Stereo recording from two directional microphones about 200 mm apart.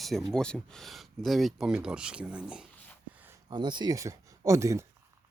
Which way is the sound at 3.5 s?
20° right (ahead or behind).